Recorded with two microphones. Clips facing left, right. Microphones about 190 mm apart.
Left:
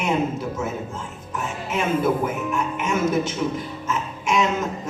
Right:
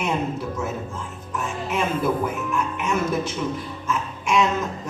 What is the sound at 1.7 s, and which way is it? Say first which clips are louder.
Speech: left 2 dB; 20° left (ahead or behind).